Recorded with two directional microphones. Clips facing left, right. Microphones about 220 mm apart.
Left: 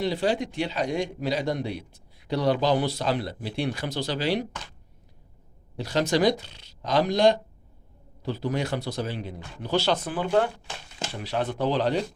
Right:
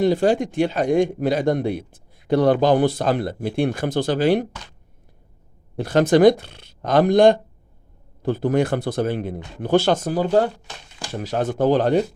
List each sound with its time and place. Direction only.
0.0 s a man's voice: 50° right (ahead or behind)
5.7 s a man's voice: 55° right (ahead or behind)